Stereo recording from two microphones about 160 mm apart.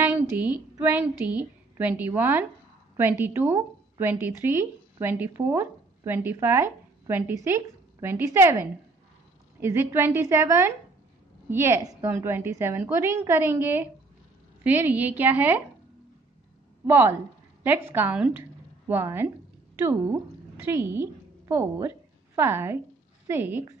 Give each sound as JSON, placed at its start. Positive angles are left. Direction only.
{"t": 0.0, "sound": "a woman's voice", "side_deg": -10}
{"t": 16.8, "sound": "a woman's voice", "side_deg": -15}